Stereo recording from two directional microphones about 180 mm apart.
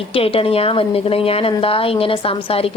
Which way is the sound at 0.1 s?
30° left (ahead or behind).